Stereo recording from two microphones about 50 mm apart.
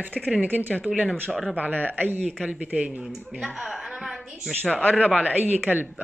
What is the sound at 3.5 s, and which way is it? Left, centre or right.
Speech, centre.